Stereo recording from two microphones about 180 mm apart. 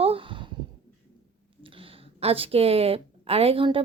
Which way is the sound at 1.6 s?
30° right (ahead or behind).